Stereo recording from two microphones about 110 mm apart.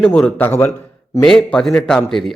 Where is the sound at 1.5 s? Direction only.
10° left (ahead or behind).